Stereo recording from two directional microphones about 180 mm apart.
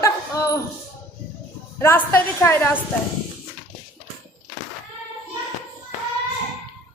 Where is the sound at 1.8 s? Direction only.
10° left (ahead or behind).